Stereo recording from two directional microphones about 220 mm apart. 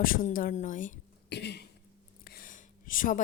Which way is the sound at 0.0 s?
40° left (ahead or behind).